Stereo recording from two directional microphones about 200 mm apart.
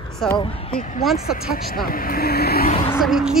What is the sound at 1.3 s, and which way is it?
Speech, 45° left (ahead or behind).